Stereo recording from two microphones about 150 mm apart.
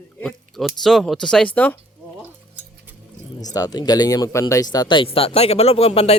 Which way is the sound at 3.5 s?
25° left (ahead or behind).